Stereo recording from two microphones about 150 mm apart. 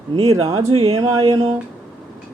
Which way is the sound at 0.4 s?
20° right (ahead or behind).